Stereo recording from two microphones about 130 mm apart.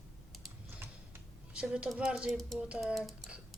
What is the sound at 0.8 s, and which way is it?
Tick-tock, 20° right (ahead or behind).